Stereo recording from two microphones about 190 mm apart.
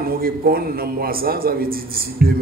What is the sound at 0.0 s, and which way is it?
A man's voice, 50° right (ahead or behind).